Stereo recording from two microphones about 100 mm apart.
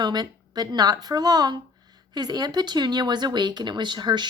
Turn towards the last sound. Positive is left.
turn(degrees=-45)  # may be behind; listen again after turning